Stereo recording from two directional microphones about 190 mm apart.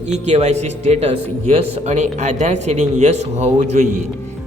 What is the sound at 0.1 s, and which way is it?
A man's voice, 35° right (ahead or behind).